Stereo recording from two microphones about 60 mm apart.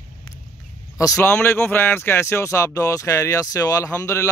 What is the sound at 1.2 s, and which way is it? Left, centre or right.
Speech, left.